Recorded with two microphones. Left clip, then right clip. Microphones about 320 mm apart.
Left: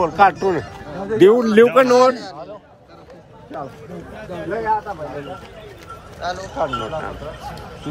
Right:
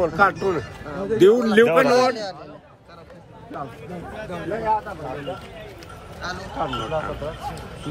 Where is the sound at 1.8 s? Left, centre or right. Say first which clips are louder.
Left 4 dB; right.